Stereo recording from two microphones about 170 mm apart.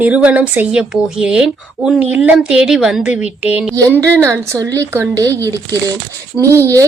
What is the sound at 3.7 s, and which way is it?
A woman's voice, 20° right (ahead or behind).